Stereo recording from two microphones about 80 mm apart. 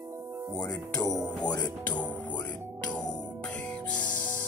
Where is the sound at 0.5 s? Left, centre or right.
Centre.